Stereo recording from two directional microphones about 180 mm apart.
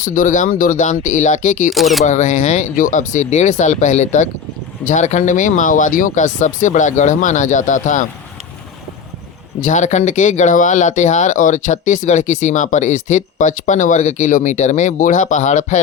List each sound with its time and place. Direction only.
0.0 s speech: 50° left (ahead or behind)
1.7 s speech: centre (ahead or behind)
2.0 s speech: 40° left (ahead or behind)
9.6 s speech: 45° left (ahead or behind)